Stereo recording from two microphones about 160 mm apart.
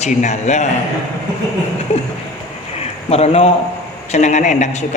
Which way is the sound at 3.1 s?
40° left (ahead or behind).